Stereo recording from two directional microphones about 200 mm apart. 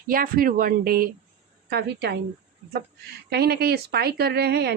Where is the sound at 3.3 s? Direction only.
55° right (ahead or behind).